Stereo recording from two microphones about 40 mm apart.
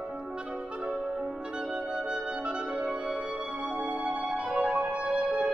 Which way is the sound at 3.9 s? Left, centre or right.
Right.